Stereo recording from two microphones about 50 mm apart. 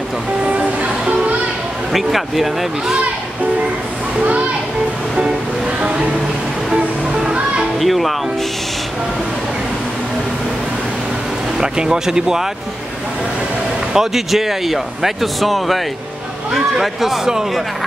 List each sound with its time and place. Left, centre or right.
0.5 s music: right
1.9 s speech: centre
5.8 s music: centre
7.8 s speech: centre
11.6 s speech: centre
13.9 s speech: centre